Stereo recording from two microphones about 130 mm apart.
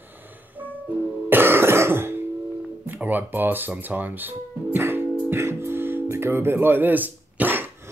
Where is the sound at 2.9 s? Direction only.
15° right (ahead or behind).